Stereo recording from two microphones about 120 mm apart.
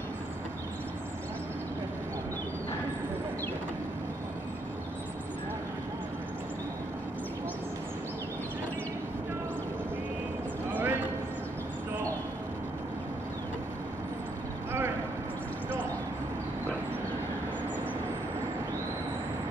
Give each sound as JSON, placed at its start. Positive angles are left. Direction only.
{"t": 10.7, "sound": "clip-clop", "side_deg": -15}